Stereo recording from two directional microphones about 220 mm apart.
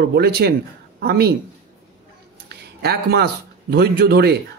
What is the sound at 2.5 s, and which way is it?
Speech, 45° right (ahead or behind).